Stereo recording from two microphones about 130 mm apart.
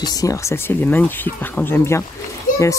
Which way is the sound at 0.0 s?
30° left (ahead or behind).